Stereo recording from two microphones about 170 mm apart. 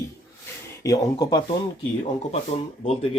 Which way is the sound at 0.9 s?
25° left (ahead or behind).